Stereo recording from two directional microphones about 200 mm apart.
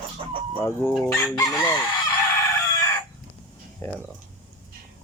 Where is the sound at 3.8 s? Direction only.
10° left (ahead or behind).